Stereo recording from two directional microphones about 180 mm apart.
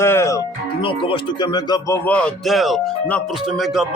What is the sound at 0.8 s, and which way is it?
Speech, 30° left (ahead or behind).